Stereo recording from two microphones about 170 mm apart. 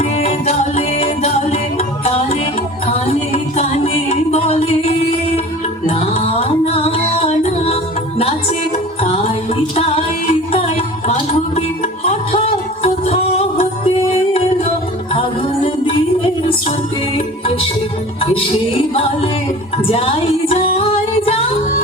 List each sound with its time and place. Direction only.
0.0 s music: 40° left (ahead or behind)
15.1 s music: 30° left (ahead or behind)
17.2 s music: 35° left (ahead or behind)
19.7 s music: 35° left (ahead or behind)